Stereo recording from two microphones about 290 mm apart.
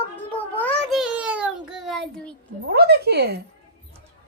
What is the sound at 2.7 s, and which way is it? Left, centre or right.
Speech, right.